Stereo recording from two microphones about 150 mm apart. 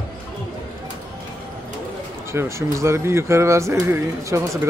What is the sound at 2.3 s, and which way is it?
Speech, 20° right (ahead or behind).